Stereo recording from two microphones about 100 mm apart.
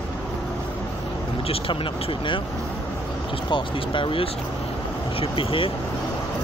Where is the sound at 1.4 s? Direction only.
70° left (ahead or behind).